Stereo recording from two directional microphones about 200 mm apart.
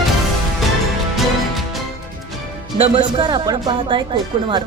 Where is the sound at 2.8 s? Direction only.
25° right (ahead or behind).